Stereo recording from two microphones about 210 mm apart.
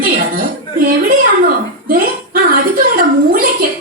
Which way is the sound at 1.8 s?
45° right (ahead or behind).